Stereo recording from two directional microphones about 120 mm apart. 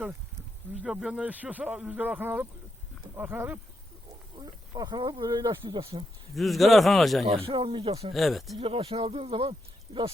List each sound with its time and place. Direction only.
0.8 s speech: 10° right (ahead or behind)
4.4 s speech: 35° right (ahead or behind)
6.3 s a man's voice: centre (ahead or behind)
7.3 s speech: 50° right (ahead or behind)
8.1 s a man's voice: centre (ahead or behind)
8.5 s speech: 55° right (ahead or behind)